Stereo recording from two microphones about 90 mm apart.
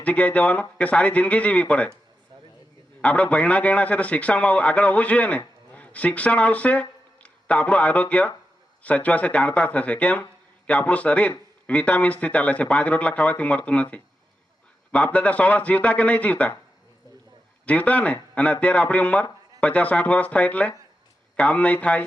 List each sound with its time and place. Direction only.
0.0 s speech: 15° left (ahead or behind)
3.0 s speech: 15° left (ahead or behind)
17.7 s speech: 15° left (ahead or behind)